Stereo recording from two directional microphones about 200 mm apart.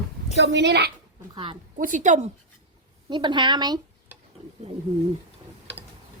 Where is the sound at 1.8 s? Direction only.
40° right (ahead or behind).